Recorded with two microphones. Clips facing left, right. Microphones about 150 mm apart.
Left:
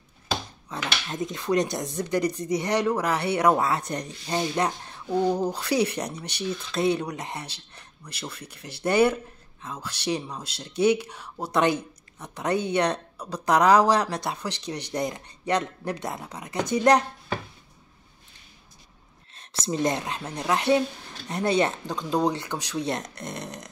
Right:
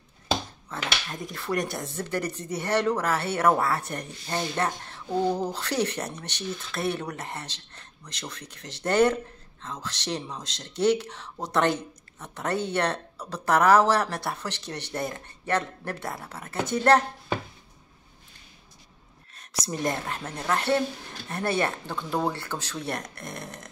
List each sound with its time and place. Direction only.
0.7 s speech: 20° left (ahead or behind)
19.6 s speech: 20° left (ahead or behind)